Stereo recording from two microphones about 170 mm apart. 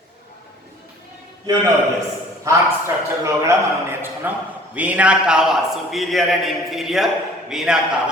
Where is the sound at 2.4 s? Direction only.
15° right (ahead or behind).